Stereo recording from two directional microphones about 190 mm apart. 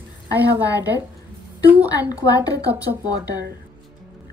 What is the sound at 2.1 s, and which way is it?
A woman's voice, 20° left (ahead or behind).